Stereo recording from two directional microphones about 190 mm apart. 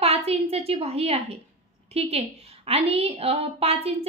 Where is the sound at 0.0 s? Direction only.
30° right (ahead or behind).